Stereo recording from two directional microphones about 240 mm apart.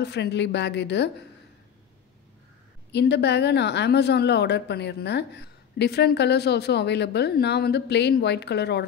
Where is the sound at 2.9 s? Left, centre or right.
Left.